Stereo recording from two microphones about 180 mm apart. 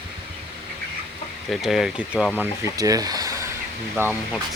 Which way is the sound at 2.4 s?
20° right (ahead or behind).